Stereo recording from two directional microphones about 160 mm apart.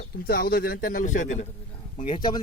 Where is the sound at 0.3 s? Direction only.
70° left (ahead or behind); by 1.5 s 50° left (ahead or behind).